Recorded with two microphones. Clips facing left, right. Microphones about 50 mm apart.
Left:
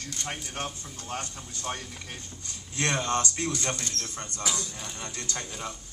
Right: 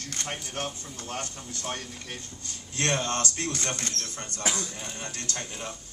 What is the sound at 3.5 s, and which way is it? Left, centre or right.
Speech, right.